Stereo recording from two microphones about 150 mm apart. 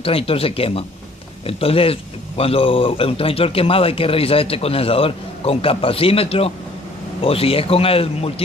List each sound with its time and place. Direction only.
0.0 s speech: 40° left (ahead or behind)